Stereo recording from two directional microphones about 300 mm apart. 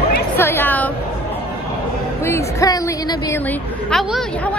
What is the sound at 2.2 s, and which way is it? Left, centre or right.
A woman's voice, centre.